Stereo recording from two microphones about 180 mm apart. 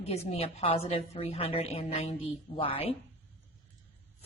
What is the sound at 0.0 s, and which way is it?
A woman's voice, 35° left (ahead or behind).